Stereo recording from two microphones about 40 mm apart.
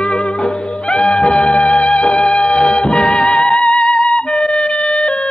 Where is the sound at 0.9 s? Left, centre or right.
Centre.